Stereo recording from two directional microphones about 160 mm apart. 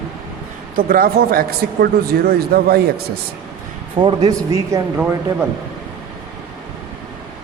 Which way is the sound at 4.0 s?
25° right (ahead or behind).